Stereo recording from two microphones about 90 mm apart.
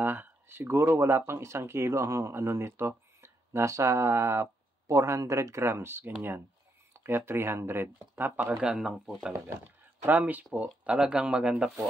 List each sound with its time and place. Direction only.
0.0 s speech: 25° right (ahead or behind)
8.4 s speech: 10° right (ahead or behind)
10.0 s speech: 20° right (ahead or behind)